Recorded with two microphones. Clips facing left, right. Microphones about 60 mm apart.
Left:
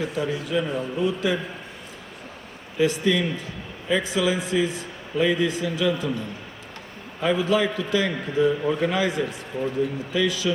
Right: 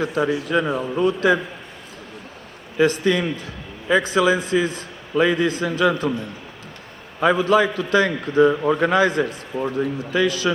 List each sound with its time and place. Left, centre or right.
0.0 s a man's voice: right
2.7 s a man's voice: right
7.2 s a man's voice: right